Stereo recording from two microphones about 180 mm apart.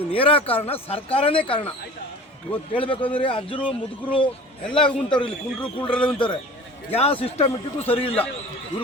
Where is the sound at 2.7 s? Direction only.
30° left (ahead or behind).